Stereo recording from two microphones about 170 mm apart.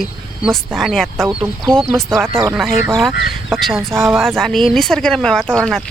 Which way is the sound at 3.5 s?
Centre (ahead or behind).